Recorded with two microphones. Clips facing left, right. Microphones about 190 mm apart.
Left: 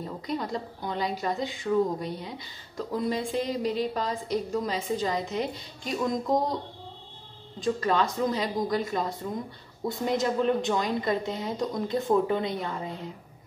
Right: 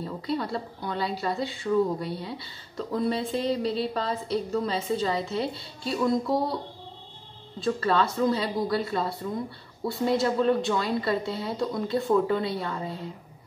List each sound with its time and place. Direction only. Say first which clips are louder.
0.3 s a woman's voice: right 2 dB; 15° left (ahead or behind)
7.6 s a woman's voice: right 1 dB; 15° left (ahead or behind)